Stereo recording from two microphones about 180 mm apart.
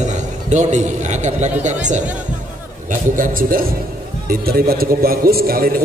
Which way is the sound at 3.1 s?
50° right (ahead or behind).